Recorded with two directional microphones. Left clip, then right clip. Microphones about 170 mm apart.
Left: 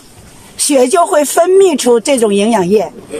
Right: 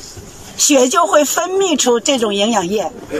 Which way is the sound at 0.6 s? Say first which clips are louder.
Left 2 dB; 30° left (ahead or behind).